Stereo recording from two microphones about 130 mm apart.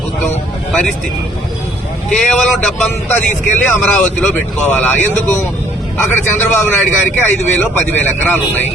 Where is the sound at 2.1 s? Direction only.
Centre (ahead or behind).